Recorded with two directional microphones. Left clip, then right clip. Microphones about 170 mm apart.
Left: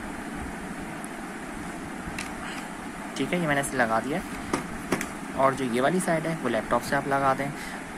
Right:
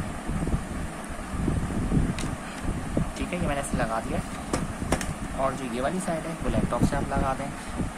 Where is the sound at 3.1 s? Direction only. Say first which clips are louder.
Left 7 dB; 20° left (ahead or behind).